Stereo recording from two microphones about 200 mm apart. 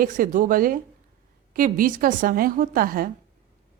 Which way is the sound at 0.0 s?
45° right (ahead or behind).